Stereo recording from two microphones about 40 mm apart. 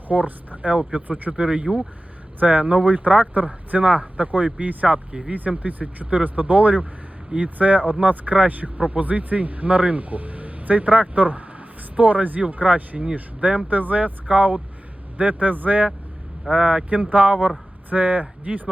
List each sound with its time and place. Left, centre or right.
0.1 s speech: right
1.6 s speech: centre
2.4 s speech: right
16.5 s speech: right